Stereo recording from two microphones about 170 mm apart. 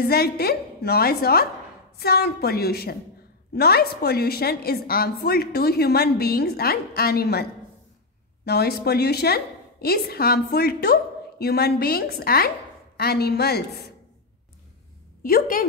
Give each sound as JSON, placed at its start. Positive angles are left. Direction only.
{"t": 0.0, "sound": "a woman's voice", "side_deg": 65}
{"t": 8.5, "sound": "a woman's voice", "side_deg": 70}
{"t": 15.2, "sound": "a woman's voice", "side_deg": 55}